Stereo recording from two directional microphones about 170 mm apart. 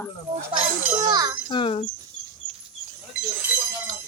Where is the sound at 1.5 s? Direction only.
35° left (ahead or behind).